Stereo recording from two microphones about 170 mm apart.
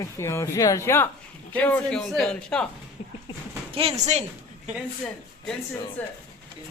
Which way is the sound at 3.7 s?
35° right (ahead or behind).